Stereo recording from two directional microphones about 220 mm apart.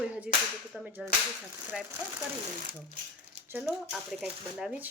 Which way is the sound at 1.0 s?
Centre (ahead or behind).